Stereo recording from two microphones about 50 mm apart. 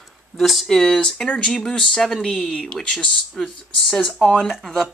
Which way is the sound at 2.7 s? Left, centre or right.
Centre.